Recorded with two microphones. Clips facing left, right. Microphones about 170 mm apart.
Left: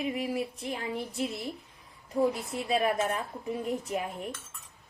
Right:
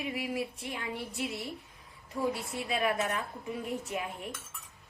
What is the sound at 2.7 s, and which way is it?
A woman's voice, 35° left (ahead or behind).